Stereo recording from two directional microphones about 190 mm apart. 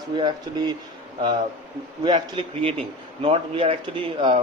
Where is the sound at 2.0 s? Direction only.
25° right (ahead or behind).